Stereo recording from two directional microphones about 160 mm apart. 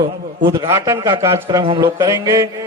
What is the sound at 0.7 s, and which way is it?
A man's voice, 20° right (ahead or behind).